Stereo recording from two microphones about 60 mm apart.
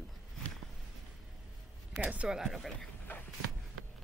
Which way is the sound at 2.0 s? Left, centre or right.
Centre.